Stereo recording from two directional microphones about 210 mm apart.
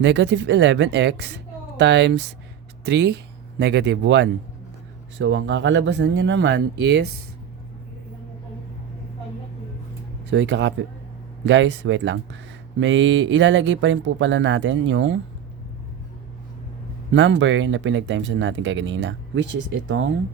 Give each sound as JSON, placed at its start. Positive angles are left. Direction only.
{"t": 0.0, "sound": "speech", "side_deg": -60}
{"t": 10.2, "sound": "speech", "side_deg": -60}
{"t": 17.1, "sound": "speech", "side_deg": -60}